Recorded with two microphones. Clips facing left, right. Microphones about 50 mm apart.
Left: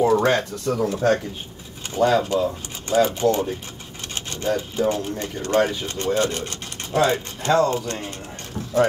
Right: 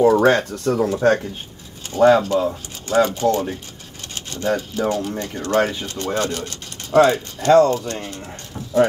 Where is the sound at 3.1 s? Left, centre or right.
Centre.